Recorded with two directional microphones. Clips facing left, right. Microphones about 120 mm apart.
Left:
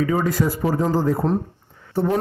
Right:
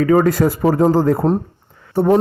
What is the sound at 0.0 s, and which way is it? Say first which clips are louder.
A man's voice: right 7 dB; 60° right (ahead or behind).